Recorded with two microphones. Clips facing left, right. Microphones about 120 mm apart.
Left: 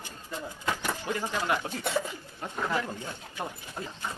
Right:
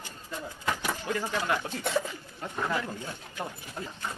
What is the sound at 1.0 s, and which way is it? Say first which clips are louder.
Speech: even; 15° left (ahead or behind).